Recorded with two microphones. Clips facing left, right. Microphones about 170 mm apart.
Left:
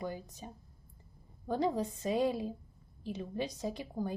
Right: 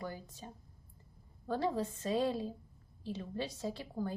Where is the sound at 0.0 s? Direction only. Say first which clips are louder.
Left 3 dB; 20° left (ahead or behind).